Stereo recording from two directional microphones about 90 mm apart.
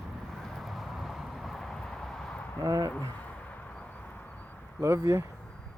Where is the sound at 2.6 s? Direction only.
40° right (ahead or behind).